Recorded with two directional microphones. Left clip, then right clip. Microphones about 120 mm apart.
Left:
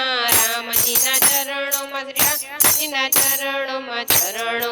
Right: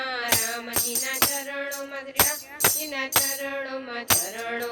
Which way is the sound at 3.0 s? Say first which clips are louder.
Left 5 dB; 30° left (ahead or behind).